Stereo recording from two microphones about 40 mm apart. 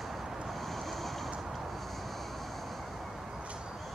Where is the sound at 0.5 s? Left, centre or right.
Centre.